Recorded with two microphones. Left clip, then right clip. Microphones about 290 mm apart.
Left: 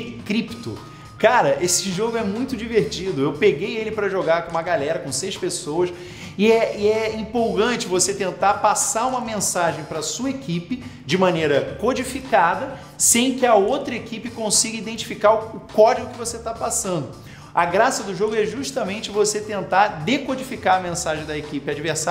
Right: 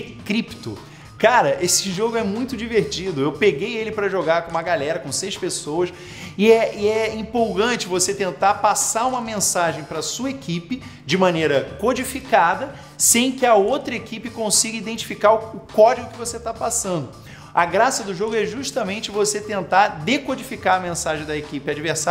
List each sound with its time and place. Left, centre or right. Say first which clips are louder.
0.3 s a woman's voice: right 1 dB; right